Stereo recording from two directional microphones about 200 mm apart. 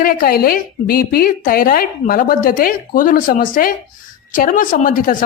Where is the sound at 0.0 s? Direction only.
45° left (ahead or behind).